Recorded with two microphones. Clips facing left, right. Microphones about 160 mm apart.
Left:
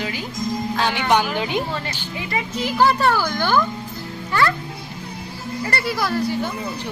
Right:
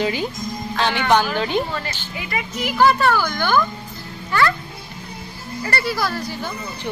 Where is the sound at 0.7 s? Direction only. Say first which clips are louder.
Right 2 dB; 10° left (ahead or behind).